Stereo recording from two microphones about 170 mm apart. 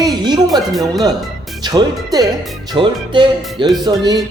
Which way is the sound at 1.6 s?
25° right (ahead or behind).